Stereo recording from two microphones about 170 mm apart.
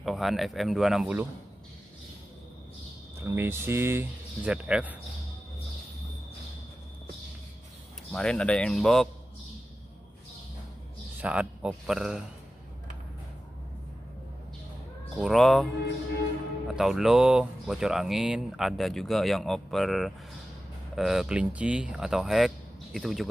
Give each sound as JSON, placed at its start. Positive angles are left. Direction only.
{"t": 0.0, "sound": "speech", "side_deg": 0}
{"t": 3.2, "sound": "speech", "side_deg": -15}
{"t": 8.1, "sound": "speech", "side_deg": 5}
{"t": 11.1, "sound": "speech", "side_deg": -5}
{"t": 15.1, "sound": "speech", "side_deg": 0}